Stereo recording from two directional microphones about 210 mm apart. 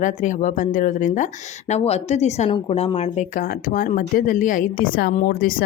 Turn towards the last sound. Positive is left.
turn(degrees=45)  # may be behind; listen again after turning